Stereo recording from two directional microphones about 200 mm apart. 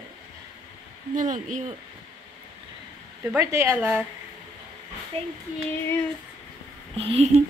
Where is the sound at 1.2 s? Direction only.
40° right (ahead or behind).